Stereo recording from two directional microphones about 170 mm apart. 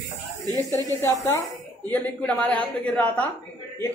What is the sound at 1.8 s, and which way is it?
A woman's voice, 10° left (ahead or behind).